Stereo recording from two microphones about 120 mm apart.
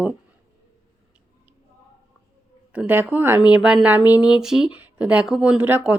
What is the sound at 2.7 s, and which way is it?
Speech, 15° right (ahead or behind).